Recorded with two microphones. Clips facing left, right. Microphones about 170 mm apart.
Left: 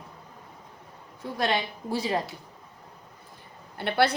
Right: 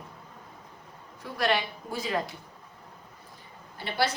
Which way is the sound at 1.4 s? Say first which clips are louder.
Even; 30° left (ahead or behind).